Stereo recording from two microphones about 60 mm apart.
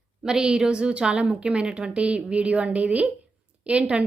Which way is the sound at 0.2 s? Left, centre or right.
Centre.